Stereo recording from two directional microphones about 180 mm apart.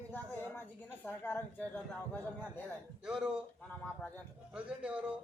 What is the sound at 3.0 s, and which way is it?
Speech, 5° right (ahead or behind).